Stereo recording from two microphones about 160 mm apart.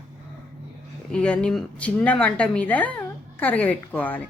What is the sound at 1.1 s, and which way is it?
Speech, 5° left (ahead or behind).